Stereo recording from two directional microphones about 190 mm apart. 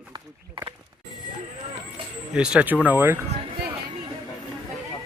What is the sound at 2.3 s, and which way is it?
Speech, 5° right (ahead or behind).